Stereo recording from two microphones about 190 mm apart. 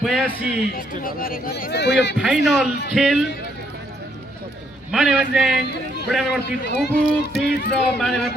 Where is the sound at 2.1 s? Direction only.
Centre (ahead or behind).